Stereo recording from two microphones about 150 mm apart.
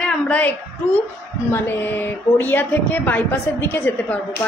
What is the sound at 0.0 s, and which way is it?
A woman's voice, 10° left (ahead or behind).